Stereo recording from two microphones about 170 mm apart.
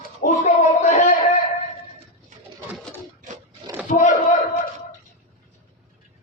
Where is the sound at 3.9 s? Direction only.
45° left (ahead or behind).